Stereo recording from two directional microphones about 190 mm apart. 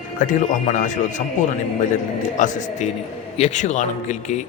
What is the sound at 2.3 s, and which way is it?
Speech, 40° left (ahead or behind).